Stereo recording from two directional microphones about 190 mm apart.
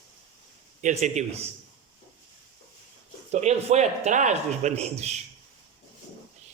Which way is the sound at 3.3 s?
35° right (ahead or behind).